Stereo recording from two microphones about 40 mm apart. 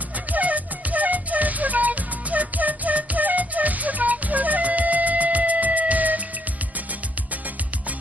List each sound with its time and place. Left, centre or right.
0.3 s music: right